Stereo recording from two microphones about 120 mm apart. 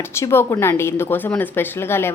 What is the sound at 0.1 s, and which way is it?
A woman's voice, 20° left (ahead or behind).